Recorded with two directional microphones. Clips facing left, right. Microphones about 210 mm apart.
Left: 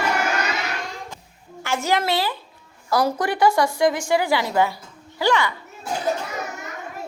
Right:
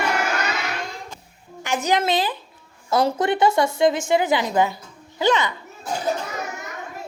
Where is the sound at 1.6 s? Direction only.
15° right (ahead or behind).